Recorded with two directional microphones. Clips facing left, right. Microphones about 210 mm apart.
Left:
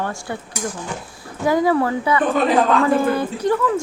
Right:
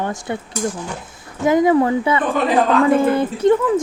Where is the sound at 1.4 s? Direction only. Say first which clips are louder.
Right 3 dB; 20° right (ahead or behind).